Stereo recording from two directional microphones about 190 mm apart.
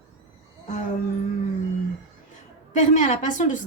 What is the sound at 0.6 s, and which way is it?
Music, 40° left (ahead or behind).